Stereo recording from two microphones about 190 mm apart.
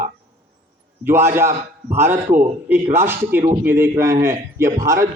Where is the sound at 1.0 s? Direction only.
15° right (ahead or behind).